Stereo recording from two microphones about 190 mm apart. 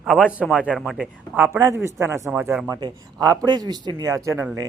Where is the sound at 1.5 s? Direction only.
15° right (ahead or behind).